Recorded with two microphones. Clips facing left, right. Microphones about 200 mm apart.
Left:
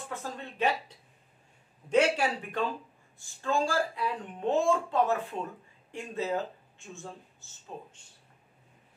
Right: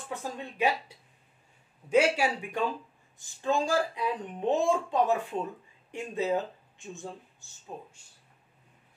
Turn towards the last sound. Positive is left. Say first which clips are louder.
# right 1 dB
turn(degrees=-15)  # may be behind; listen again after turning